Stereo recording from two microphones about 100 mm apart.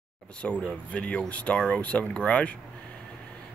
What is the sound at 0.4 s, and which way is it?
Speech, 10° left (ahead or behind).